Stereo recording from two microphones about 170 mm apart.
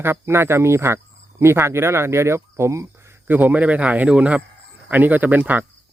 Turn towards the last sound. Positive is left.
turn(degrees=-10)  # may be behind; listen again after turning